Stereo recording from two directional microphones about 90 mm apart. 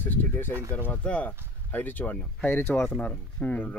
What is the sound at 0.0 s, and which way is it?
Speech, 20° left (ahead or behind).